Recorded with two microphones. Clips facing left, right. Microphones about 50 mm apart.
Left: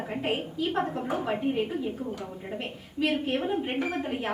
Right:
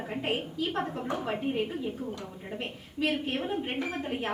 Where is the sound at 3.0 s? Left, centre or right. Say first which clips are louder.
Left 3 dB; centre.